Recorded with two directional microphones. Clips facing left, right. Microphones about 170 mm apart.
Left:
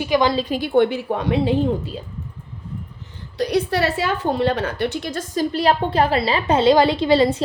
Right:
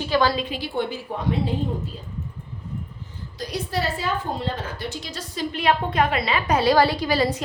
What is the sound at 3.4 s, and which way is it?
A woman's voice, 70° left (ahead or behind).